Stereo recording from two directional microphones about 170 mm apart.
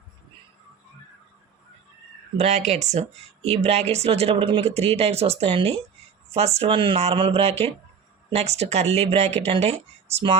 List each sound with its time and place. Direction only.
2.4 s speech: 40° right (ahead or behind)